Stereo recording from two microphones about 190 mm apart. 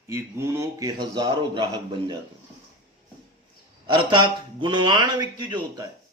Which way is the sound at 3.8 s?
25° right (ahead or behind).